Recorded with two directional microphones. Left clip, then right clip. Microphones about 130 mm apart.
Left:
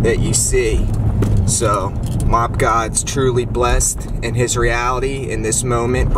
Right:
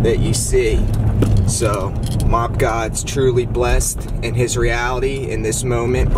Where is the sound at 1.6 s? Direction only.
15° left (ahead or behind).